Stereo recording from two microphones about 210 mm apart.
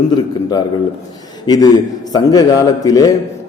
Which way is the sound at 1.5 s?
20° left (ahead or behind).